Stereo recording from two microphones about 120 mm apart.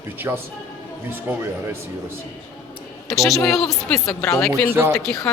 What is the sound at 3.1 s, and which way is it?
A woman's voice, centre (ahead or behind).